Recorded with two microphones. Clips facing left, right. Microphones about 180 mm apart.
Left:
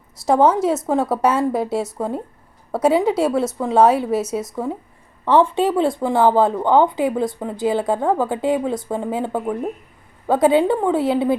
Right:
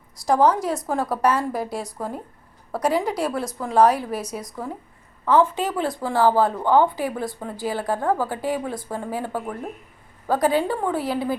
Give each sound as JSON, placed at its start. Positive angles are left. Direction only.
{"t": 0.3, "sound": "speech", "side_deg": 25}